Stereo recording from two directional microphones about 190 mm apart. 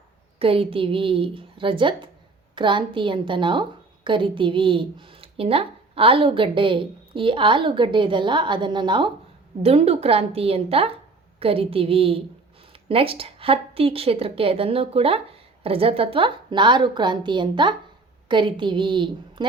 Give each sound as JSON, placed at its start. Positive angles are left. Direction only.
{"t": 0.3, "sound": "a woman's voice", "side_deg": -30}